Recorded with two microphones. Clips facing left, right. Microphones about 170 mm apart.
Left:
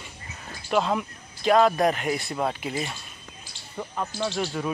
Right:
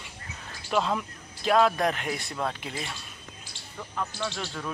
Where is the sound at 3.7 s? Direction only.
20° left (ahead or behind).